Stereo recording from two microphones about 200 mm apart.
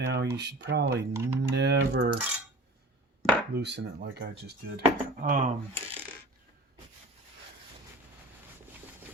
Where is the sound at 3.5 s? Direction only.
60° right (ahead or behind).